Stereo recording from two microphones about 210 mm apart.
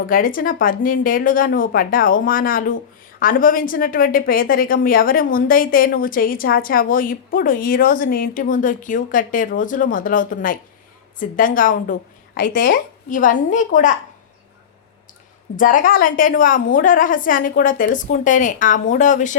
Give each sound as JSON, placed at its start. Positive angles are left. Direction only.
{"t": 0.1, "sound": "a woman's voice", "side_deg": 40}
{"t": 15.5, "sound": "speech", "side_deg": 40}